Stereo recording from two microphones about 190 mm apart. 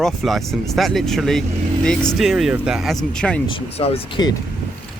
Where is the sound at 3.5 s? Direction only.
30° left (ahead or behind).